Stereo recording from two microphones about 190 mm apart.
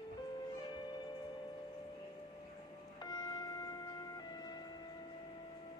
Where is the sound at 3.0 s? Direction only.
20° left (ahead or behind).